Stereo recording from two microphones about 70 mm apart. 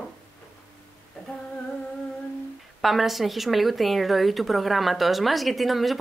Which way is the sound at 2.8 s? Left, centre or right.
Centre.